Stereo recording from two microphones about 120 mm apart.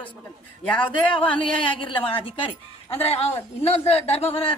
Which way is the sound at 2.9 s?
60° left (ahead or behind).